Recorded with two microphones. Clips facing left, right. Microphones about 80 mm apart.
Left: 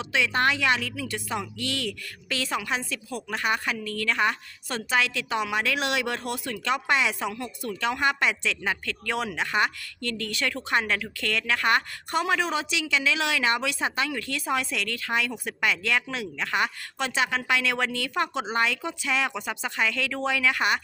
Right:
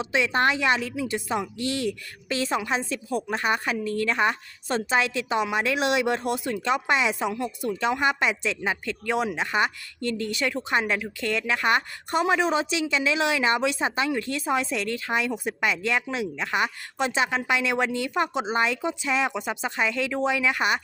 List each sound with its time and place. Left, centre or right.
0.0 s a woman's voice: right